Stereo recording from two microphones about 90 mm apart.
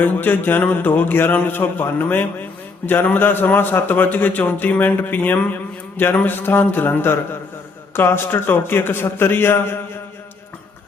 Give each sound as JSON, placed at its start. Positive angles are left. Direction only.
{"t": 0.0, "sound": "a man's voice", "side_deg": 20}